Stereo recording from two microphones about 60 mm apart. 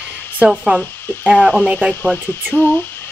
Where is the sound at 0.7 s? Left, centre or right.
Right.